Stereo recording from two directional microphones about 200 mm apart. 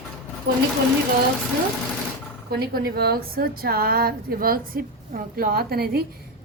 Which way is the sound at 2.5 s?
50° right (ahead or behind).